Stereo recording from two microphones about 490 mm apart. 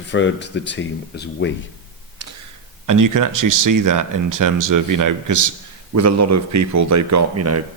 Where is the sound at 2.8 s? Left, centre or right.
Right.